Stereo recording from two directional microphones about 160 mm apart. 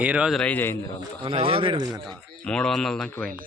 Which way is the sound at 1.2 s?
35° right (ahead or behind).